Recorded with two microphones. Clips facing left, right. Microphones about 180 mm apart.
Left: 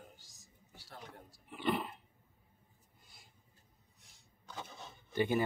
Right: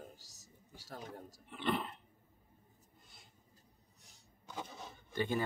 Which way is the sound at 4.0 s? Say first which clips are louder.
Right 2 dB; 40° right (ahead or behind).